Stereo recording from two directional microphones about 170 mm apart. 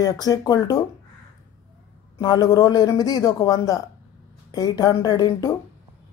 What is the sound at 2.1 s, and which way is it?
Speech, 20° left (ahead or behind).